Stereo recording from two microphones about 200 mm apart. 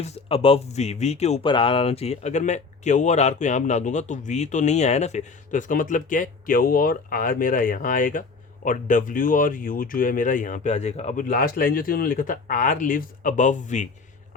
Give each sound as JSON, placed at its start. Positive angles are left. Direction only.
{"t": 0.0, "sound": "speech", "side_deg": 30}